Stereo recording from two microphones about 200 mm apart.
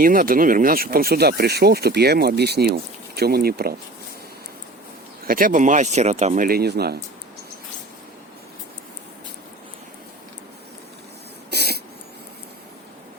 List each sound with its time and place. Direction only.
0.0 s speech: 45° right (ahead or behind)
5.2 s speech: 45° right (ahead or behind)
11.5 s a sound: 55° right (ahead or behind)